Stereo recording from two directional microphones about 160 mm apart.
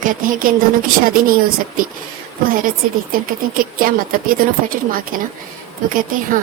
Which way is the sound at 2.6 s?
60° right (ahead or behind).